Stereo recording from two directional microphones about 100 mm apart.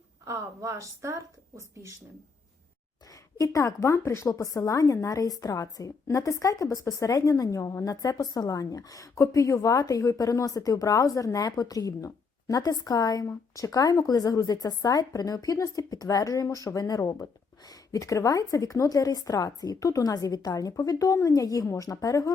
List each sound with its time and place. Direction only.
0.3 s a woman's voice: 30° right (ahead or behind)
3.1 s a woman's voice: 35° left (ahead or behind)